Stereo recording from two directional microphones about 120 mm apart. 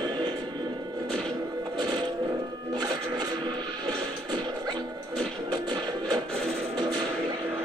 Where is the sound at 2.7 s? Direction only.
35° right (ahead or behind).